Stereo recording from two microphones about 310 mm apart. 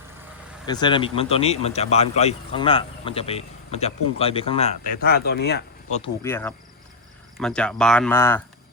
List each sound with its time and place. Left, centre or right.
0.7 s speech: centre; by 6.0 s left
6.0 s speech: centre